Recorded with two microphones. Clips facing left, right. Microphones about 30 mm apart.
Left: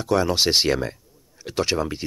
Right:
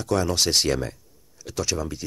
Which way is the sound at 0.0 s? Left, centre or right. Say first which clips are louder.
Left 3 dB; left.